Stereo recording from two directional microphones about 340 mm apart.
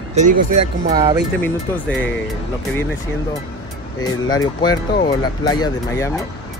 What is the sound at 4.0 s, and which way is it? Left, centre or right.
Speech, centre.